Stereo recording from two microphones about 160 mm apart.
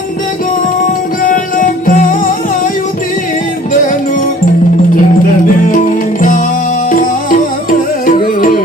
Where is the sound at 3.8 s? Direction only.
55° left (ahead or behind).